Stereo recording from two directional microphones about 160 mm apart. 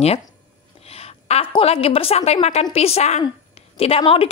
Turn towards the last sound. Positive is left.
turn(degrees=35)  # may be behind; listen again after turning